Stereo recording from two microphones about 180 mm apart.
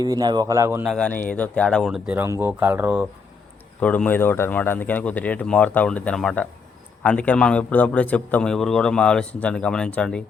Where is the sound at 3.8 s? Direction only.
10° left (ahead or behind).